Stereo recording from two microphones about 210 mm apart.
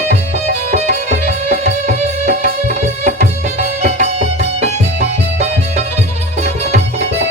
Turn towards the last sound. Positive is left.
turn(degrees=-30)  # may be behind; listen again after turning